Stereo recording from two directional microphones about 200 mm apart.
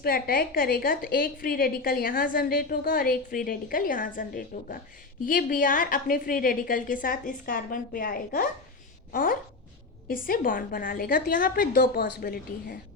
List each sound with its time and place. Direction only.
0.0 s a woman's voice: 45° left (ahead or behind)